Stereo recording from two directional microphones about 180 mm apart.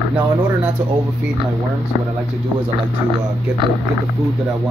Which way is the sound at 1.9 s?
25° right (ahead or behind).